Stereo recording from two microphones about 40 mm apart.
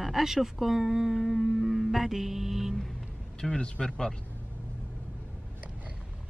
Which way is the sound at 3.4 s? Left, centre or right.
Left.